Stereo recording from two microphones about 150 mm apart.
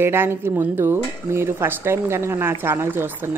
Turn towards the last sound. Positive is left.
turn(degrees=-15)  # may be behind; listen again after turning